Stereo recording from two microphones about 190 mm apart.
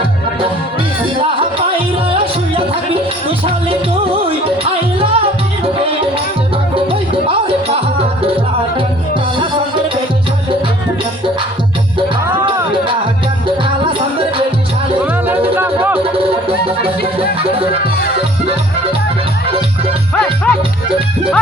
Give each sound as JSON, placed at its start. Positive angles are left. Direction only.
{"t": 2.1, "sound": "music", "side_deg": -30}
{"t": 6.7, "sound": "music", "side_deg": -30}
{"t": 11.9, "sound": "music", "side_deg": -25}
{"t": 15.0, "sound": "music", "side_deg": -10}
{"t": 17.2, "sound": "music", "side_deg": -30}
{"t": 19.5, "sound": "music", "side_deg": -30}
{"t": 20.1, "sound": "music", "side_deg": 5}